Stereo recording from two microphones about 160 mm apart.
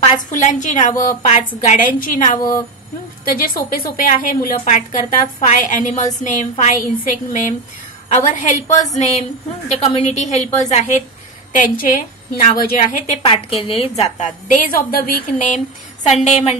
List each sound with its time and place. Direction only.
0.4 s a woman's voice: 50° left (ahead or behind)
11.5 s a woman's voice: 55° left (ahead or behind)
13.3 s a woman's voice: 35° left (ahead or behind); by 15.2 s 70° left (ahead or behind)
15.3 s a woman's voice: 50° left (ahead or behind)